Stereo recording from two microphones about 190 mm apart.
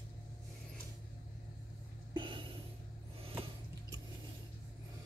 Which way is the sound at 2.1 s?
25° right (ahead or behind).